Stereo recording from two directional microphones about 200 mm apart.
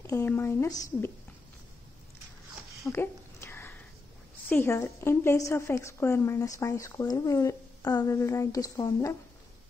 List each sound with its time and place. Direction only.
0.0 s a woman's voice: 10° left (ahead or behind)
2.9 s a sound: 10° left (ahead or behind)
4.5 s a woman's voice: 10° left (ahead or behind)